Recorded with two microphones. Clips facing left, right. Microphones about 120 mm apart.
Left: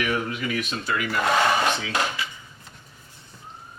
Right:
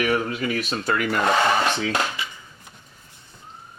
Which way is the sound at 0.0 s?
35° right (ahead or behind).